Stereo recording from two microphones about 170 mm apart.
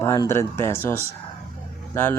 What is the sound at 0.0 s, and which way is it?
Speech, 15° left (ahead or behind).